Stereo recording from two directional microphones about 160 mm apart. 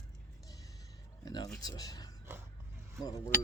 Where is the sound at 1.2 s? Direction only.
25° left (ahead or behind).